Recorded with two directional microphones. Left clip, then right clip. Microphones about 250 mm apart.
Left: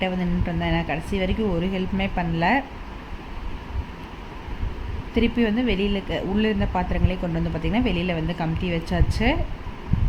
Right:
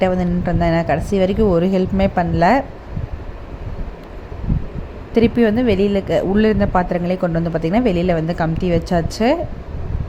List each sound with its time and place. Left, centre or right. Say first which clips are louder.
0.0 s a woman's voice: right 9 dB; centre
5.1 s a woman's voice: right 8 dB; centre